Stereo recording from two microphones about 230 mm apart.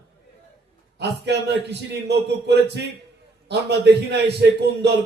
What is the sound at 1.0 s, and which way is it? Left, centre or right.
A man's voice, right.